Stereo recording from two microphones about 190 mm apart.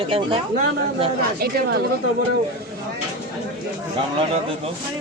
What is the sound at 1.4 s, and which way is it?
Speech, 65° right (ahead or behind).